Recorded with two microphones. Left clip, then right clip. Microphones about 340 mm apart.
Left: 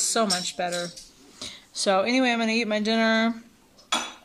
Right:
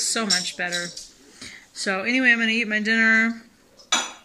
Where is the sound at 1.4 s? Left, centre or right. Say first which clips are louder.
Left 2 dB; centre.